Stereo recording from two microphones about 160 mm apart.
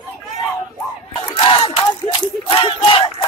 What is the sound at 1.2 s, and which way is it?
Battle cry, 30° left (ahead or behind).